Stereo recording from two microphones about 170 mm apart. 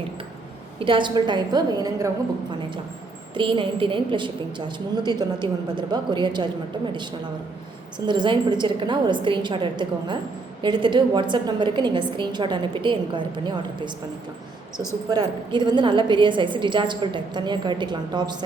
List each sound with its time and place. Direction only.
0.8 s a woman's voice: 30° right (ahead or behind)
3.3 s a woman's voice: 30° right (ahead or behind)
15.1 s a woman's voice: 25° right (ahead or behind)